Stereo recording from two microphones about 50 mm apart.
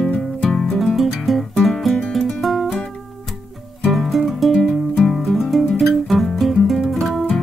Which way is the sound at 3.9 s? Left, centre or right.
Centre.